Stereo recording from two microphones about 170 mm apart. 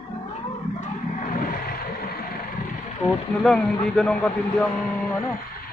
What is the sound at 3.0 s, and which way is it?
Speech, 5° left (ahead or behind).